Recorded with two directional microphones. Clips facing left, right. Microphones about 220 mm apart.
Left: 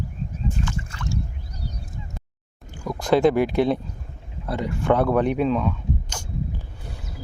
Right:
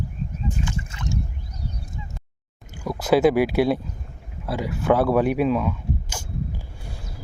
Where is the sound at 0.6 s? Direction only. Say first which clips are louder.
Even; 20° right (ahead or behind).